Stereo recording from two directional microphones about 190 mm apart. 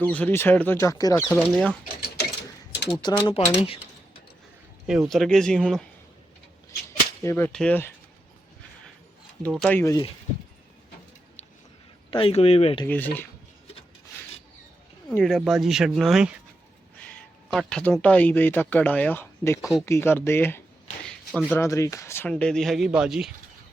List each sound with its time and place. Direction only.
0.0 s speech: 10° left (ahead or behind)
1.8 s speech: 60° left (ahead or behind)
3.0 s speech: 25° left (ahead or behind)
4.9 s speech: centre (ahead or behind)
7.2 s speech: 10° left (ahead or behind)
9.5 s speech: 5° left (ahead or behind)
9.8 s speech: 20° left (ahead or behind)
12.1 s speech: 30° left (ahead or behind)
12.8 s speech: 10° left (ahead or behind)
15.1 s speech: centre (ahead or behind)
17.5 s speech: centre (ahead or behind)
21.0 s a sound: 5° left (ahead or behind)
21.5 s speech: 15° left (ahead or behind); by 23.3 s centre (ahead or behind)